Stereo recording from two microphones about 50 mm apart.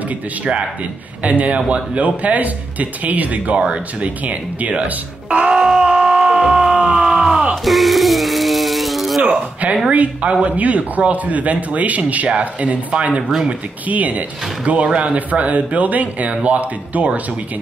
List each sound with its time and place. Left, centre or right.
1.2 s speech: right
4.3 s speech: right
5.5 s groan: centre
5.8 s music: centre
7.6 s a sound: centre
9.8 s speech: right